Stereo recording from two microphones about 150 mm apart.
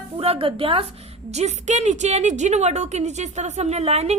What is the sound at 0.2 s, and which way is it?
Speech, 40° right (ahead or behind).